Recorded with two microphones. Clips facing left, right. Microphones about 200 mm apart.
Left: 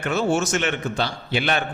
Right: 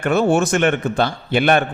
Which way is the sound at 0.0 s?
55° right (ahead or behind).